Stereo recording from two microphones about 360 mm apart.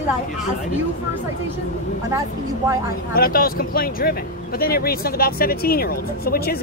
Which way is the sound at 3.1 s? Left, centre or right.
Left.